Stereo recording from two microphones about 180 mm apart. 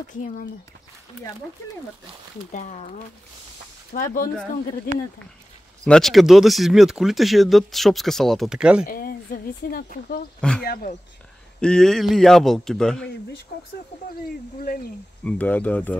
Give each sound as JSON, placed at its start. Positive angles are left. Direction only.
{"t": 2.5, "sound": "speech", "side_deg": 40}
{"t": 3.9, "sound": "speech", "side_deg": 50}
{"t": 5.9, "sound": "speech", "side_deg": 0}
{"t": 8.8, "sound": "speech", "side_deg": 55}
{"t": 11.6, "sound": "speech", "side_deg": 5}
{"t": 14.6, "sound": "speech", "side_deg": 55}
{"t": 15.2, "sound": "speech", "side_deg": 10}